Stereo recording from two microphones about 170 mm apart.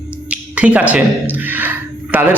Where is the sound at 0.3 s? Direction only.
10° right (ahead or behind).